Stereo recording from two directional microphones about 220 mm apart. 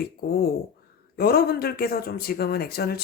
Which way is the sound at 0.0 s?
45° left (ahead or behind).